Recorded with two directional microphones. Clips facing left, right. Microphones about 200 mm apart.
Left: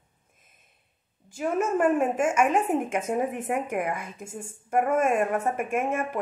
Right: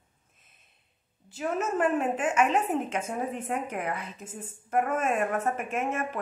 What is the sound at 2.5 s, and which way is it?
Speech, 15° left (ahead or behind).